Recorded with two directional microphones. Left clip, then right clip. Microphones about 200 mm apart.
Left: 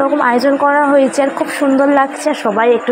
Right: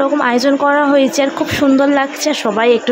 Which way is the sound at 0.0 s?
10° right (ahead or behind).